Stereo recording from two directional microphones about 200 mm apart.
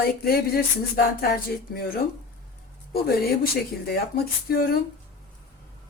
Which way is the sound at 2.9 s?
50° left (ahead or behind).